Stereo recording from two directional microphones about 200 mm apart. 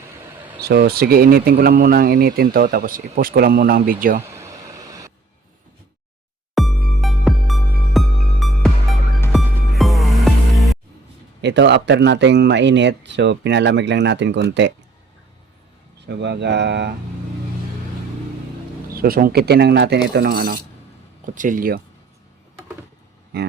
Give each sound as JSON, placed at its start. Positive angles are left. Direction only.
{"t": 0.6, "sound": "speech", "side_deg": -50}
{"t": 4.3, "sound": "vehicle", "side_deg": -15}
{"t": 6.5, "sound": "music", "side_deg": 0}
{"t": 11.4, "sound": "speech", "side_deg": -60}
{"t": 16.0, "sound": "speech", "side_deg": -55}
{"t": 18.9, "sound": "speech", "side_deg": -50}